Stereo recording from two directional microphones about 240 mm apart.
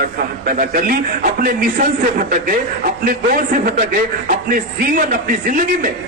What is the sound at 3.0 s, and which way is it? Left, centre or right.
A man's voice, right.